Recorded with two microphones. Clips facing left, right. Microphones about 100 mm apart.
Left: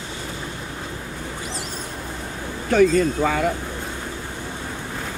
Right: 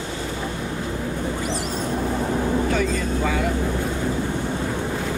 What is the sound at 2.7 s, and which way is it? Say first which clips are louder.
Speech: left 6 dB; 50° left (ahead or behind).